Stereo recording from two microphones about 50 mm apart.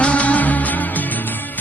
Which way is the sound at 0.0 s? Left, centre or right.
Left.